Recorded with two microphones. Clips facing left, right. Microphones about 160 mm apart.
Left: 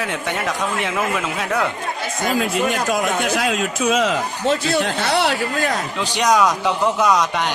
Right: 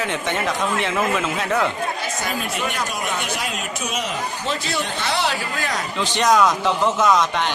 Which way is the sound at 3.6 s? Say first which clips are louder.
Left 8 dB; 90° left.